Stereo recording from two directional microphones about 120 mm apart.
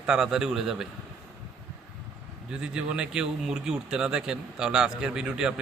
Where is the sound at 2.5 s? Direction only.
5° right (ahead or behind).